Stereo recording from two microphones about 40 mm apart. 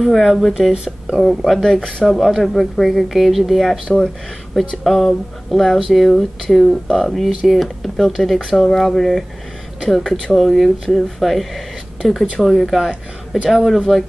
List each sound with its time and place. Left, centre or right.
0.0 s speech: centre
1.6 s speech: centre
2.0 s speech: centre
3.9 s speech: centre
4.8 s speech: centre
7.2 s speech: centre
7.8 s speech: centre